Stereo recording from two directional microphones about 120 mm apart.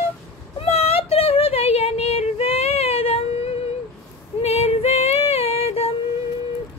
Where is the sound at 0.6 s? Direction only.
60° left (ahead or behind).